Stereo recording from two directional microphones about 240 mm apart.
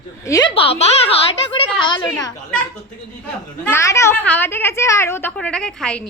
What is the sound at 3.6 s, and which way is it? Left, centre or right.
A woman's voice, centre.